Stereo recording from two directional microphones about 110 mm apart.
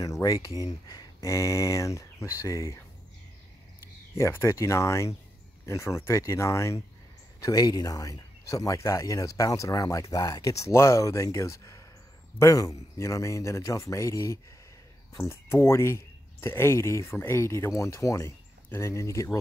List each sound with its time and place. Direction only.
0.0 s a sound: 30° left (ahead or behind)
0.8 s speech: 30° left (ahead or behind)
4.1 s speech: 25° left (ahead or behind)